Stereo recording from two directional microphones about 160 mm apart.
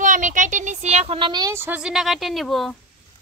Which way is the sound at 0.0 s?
55° right (ahead or behind).